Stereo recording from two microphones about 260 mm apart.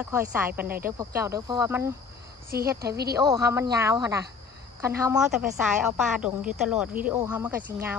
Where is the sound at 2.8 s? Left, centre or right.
Right.